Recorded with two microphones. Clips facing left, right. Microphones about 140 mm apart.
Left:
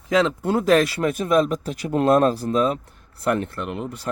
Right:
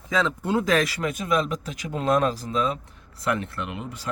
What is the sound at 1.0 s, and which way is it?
Speech, 45° left (ahead or behind).